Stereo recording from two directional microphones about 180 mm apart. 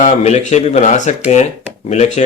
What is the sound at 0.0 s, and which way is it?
A man's voice, 40° left (ahead or behind).